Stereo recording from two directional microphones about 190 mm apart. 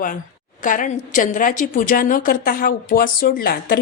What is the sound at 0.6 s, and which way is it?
A woman's voice, 45° left (ahead or behind).